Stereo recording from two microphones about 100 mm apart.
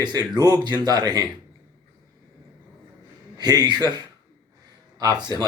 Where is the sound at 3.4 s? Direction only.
45° right (ahead or behind).